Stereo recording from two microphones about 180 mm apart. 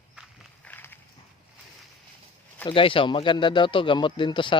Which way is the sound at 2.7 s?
30° left (ahead or behind).